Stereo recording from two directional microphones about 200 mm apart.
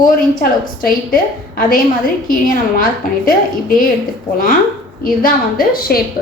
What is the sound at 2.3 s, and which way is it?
A woman's voice, 45° left (ahead or behind).